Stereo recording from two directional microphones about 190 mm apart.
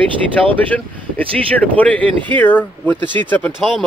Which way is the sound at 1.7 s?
10° left (ahead or behind).